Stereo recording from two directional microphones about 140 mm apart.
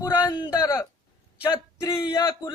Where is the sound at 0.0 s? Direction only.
25° left (ahead or behind).